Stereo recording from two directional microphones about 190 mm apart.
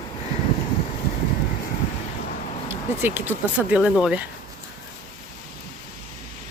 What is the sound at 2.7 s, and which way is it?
Speech, 10° right (ahead or behind).